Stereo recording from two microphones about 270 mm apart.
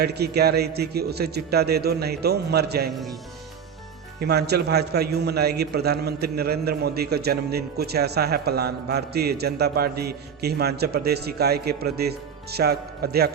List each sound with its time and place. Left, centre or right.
0.0 s a man's voice: right
4.2 s a man's voice: right